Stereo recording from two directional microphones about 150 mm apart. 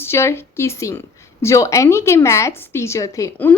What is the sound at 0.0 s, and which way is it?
A woman's voice, 15° left (ahead or behind).